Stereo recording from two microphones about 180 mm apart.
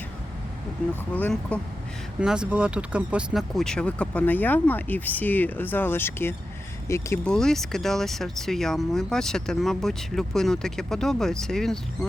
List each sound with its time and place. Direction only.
0.8 s speech: 5° left (ahead or behind)
2.2 s speech: 5° right (ahead or behind); by 7.3 s 15° left (ahead or behind)
7.3 s speech: centre (ahead or behind)